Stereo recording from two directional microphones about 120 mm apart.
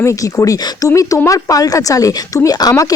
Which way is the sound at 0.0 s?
25° left (ahead or behind).